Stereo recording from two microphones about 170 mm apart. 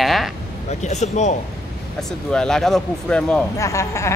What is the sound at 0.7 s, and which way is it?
Speech, 40° left (ahead or behind).